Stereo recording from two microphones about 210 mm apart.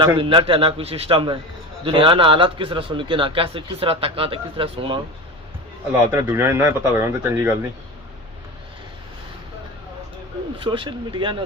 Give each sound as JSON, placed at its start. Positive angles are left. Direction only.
{"t": 0.0, "sound": "a man's voice", "side_deg": -20}
{"t": 5.9, "sound": "speech", "side_deg": -10}
{"t": 10.6, "sound": "a man's voice", "side_deg": -25}